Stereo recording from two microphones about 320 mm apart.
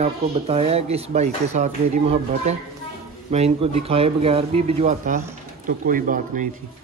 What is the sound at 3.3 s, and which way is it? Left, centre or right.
Speech, centre.